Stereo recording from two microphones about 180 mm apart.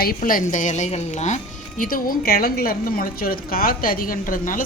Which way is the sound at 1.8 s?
50° left (ahead or behind).